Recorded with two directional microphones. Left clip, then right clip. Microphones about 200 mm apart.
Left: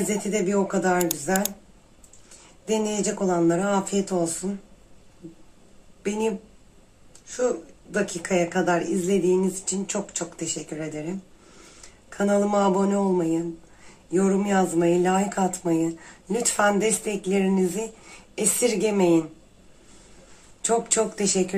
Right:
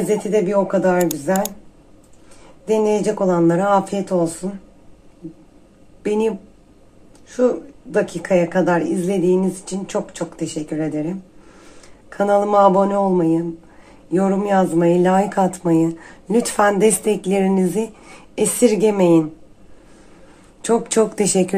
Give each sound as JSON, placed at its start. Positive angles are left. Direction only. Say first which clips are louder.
{"t": 0.3, "sound": "speech", "louder": "right 7 dB", "side_deg": -35}
{"t": 2.6, "sound": "speech", "louder": "right 8 dB", "side_deg": -40}
{"t": 6.0, "sound": "speech", "louder": "right 7 dB", "side_deg": -40}
{"t": 20.6, "sound": "speech", "louder": "right 5 dB", "side_deg": -40}
{"t": 21.1, "sound": "speech", "louder": "right 6 dB", "side_deg": -55}